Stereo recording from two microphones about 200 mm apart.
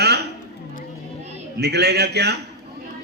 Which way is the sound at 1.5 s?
55° right (ahead or behind).